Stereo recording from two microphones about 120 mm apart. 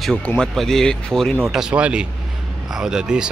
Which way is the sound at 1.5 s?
5° right (ahead or behind).